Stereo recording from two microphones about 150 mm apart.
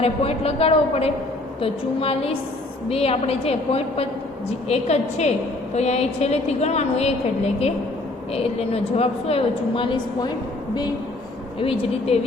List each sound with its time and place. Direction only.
0.0 s a woman's voice: 40° left (ahead or behind)
11.6 s a woman's voice: 40° left (ahead or behind)